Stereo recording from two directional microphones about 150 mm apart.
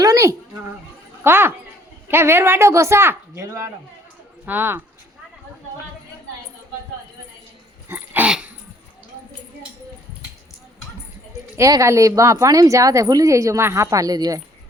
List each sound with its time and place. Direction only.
0.0 s a woman's voice: 20° right (ahead or behind)
7.9 s dog: 10° right (ahead or behind)
11.5 s speech: 20° right (ahead or behind)